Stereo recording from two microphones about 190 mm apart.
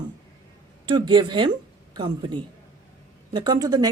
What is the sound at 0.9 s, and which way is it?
Speech, 25° right (ahead or behind).